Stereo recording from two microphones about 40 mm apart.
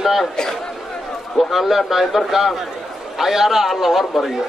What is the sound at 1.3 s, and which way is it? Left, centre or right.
Speech, centre.